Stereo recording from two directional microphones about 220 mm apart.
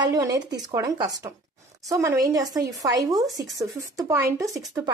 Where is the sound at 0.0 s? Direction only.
15° right (ahead or behind).